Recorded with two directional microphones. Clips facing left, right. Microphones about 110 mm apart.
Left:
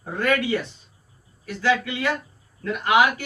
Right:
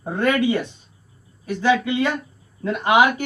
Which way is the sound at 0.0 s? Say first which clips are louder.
Right 3 dB; 20° right (ahead or behind).